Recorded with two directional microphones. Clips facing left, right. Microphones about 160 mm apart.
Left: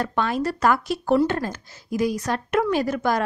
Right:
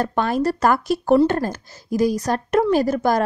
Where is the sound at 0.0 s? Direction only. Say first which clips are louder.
Right 4 dB; 40° right (ahead or behind).